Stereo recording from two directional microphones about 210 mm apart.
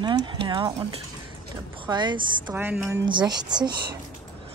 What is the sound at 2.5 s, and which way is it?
Speech, 10° right (ahead or behind).